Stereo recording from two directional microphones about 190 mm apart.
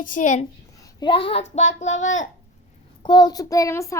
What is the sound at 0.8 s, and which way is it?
Speech, 25° left (ahead or behind).